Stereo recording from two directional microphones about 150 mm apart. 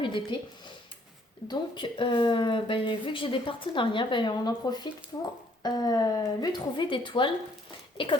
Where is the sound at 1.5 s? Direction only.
35° left (ahead or behind).